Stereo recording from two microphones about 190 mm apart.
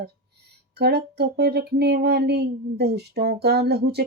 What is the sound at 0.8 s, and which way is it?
Speech, 60° right (ahead or behind).